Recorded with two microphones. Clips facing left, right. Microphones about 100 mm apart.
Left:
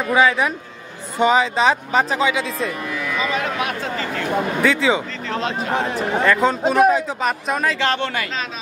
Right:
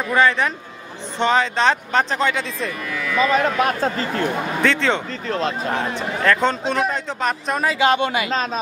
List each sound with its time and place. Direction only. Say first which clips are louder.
0.1 s speech: left 1 dB; 5° left (ahead or behind)
3.3 s speech: right 5 dB; 40° right (ahead or behind)
4.6 s speech: left 1 dB; 5° left (ahead or behind)
6.2 s speech: left 1 dB; 5° left (ahead or behind)
7.8 s speech: right 4 dB; 10° right (ahead or behind)